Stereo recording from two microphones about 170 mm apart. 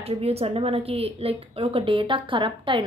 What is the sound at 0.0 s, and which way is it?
A woman's voice, 35° right (ahead or behind).